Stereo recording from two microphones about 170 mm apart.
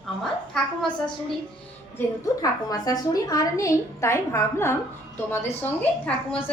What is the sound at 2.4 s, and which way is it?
A woman's voice, 20° left (ahead or behind).